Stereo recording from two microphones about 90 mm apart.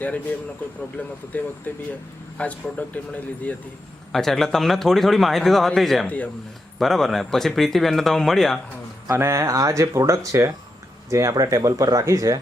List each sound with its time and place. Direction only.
0.0 s speech: 15° left (ahead or behind)
4.1 s speech: 5° left (ahead or behind)
6.1 s speech: 15° left (ahead or behind)
6.7 s speech: 5° left (ahead or behind)
9.0 s speech: 30° right (ahead or behind)